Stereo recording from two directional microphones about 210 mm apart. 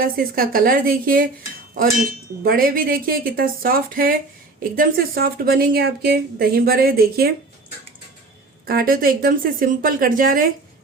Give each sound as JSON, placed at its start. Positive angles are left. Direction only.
{"t": 0.0, "sound": "a woman's voice", "side_deg": -45}
{"t": 8.6, "sound": "a woman's voice", "side_deg": -45}